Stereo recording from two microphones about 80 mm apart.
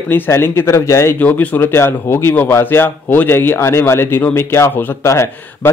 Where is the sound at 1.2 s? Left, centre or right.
Left.